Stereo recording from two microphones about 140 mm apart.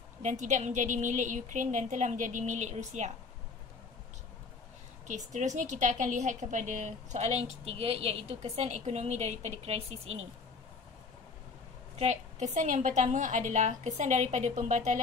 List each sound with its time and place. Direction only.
0.2 s a woman's voice: 60° right (ahead or behind)
5.0 s a woman's voice: 60° right (ahead or behind)
12.0 s a woman's voice: 55° right (ahead or behind)